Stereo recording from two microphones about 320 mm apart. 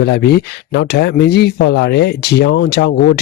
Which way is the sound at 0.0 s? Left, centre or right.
Left.